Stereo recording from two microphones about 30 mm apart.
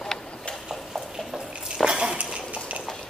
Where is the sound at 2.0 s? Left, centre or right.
Right.